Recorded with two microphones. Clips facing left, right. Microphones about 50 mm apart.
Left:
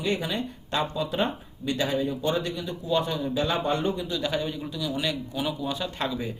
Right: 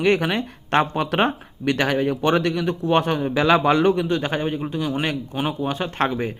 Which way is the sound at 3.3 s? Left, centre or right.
Right.